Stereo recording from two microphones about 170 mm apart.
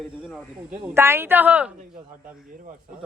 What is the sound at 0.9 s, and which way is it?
Speech, 15° right (ahead or behind).